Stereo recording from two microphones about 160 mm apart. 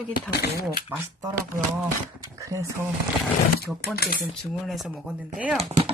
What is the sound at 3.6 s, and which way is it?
Speech, 70° left (ahead or behind).